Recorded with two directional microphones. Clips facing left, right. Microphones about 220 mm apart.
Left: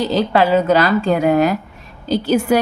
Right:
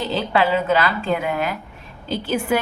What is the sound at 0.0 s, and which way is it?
A woman's voice, 40° left (ahead or behind).